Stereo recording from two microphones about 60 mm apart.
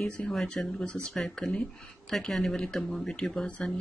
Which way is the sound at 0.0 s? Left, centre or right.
Centre.